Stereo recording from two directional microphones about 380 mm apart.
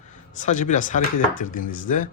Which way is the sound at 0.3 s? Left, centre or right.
Centre.